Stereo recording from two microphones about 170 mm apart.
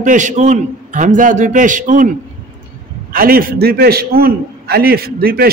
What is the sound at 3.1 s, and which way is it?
A man's voice, 60° right (ahead or behind).